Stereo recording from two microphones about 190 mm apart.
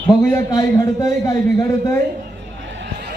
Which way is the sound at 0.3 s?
15° left (ahead or behind).